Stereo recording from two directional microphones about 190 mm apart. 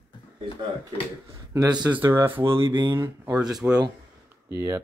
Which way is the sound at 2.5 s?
25° right (ahead or behind).